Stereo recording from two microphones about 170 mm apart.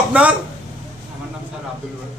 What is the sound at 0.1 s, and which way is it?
Speech, 10° right (ahead or behind).